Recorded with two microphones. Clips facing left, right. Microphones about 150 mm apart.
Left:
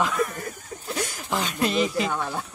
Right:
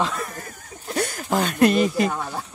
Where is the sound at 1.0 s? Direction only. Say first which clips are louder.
Right 6 dB; 50° right (ahead or behind).